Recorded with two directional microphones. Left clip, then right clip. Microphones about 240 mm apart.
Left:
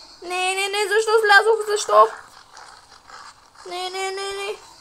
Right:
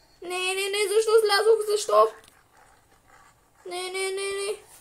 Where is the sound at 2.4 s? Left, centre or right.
Left.